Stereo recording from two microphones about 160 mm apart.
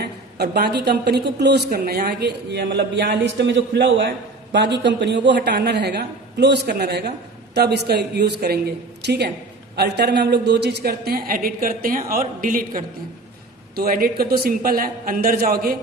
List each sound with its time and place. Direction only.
0.0 s a woman's voice: 85° right; by 15.7 s 70° right (ahead or behind)